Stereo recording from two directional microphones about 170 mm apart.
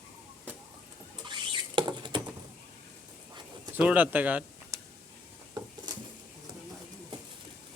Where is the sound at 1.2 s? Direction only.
25° right (ahead or behind).